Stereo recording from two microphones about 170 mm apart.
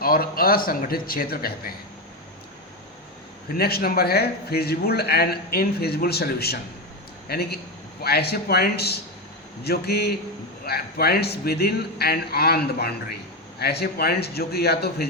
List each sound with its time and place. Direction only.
0.0 s a man's voice: 60° left (ahead or behind)
3.6 s a man's voice: 65° left (ahead or behind)